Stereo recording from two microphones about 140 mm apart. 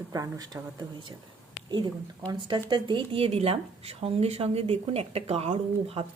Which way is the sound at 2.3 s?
35° right (ahead or behind).